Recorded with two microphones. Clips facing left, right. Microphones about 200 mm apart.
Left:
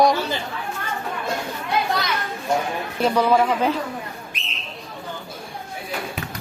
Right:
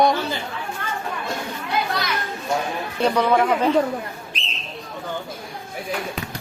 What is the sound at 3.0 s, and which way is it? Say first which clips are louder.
Speech: even; 5° left (ahead or behind).